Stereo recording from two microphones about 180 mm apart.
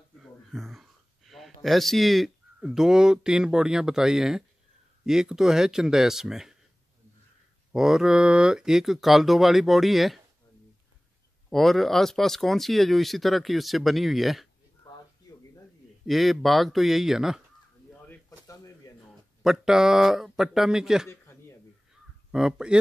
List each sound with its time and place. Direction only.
0.2 s speech: centre (ahead or behind)
7.7 s speech: 5° right (ahead or behind)
11.5 s speech: centre (ahead or behind)
14.8 s a sound: 25° left (ahead or behind)
16.1 s speech: centre (ahead or behind)
18.0 s a sound: 15° left (ahead or behind)
19.4 s speech: centre (ahead or behind)
21.1 s a sound: 15° left (ahead or behind)
22.3 s speech: 5° right (ahead or behind)